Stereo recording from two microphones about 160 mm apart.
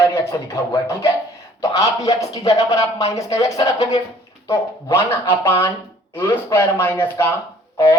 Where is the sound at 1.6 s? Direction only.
20° left (ahead or behind).